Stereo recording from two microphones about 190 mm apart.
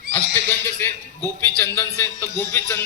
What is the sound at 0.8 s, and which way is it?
A man's voice, 10° left (ahead or behind).